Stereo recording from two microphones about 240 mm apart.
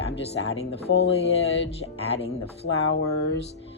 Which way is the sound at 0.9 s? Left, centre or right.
Left.